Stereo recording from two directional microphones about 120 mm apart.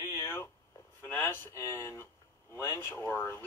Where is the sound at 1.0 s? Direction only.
20° left (ahead or behind).